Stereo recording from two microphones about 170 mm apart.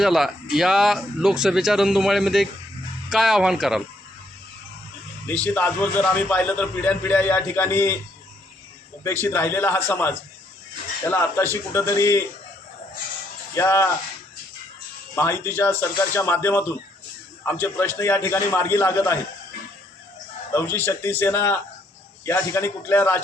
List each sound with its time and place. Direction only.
0.0 s speech: centre (ahead or behind)
5.2 s a man's voice: 10° left (ahead or behind)
9.2 s a man's voice: 15° left (ahead or behind)
13.5 s a man's voice: 15° left (ahead or behind)
15.1 s a man's voice: 15° left (ahead or behind)
20.5 s a man's voice: 15° left (ahead or behind)